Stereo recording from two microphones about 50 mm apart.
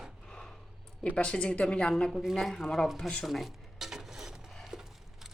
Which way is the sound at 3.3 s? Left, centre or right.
Centre.